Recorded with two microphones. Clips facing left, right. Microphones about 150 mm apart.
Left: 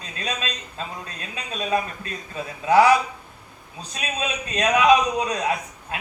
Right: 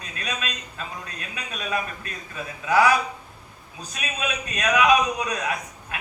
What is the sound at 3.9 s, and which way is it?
A man's voice, 30° left (ahead or behind).